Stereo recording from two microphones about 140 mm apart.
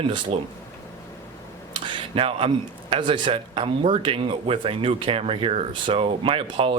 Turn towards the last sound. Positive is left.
turn(degrees=-40)  # may be behind; listen again after turning